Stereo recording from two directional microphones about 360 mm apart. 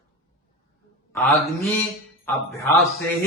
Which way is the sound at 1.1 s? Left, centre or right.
Centre.